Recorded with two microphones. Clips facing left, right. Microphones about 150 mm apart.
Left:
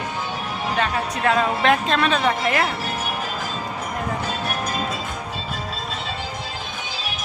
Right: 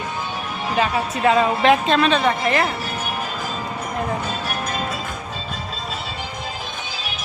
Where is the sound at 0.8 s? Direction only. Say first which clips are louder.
Right 4 dB; 5° right (ahead or behind).